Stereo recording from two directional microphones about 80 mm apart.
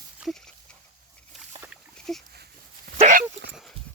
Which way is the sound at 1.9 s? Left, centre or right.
Centre.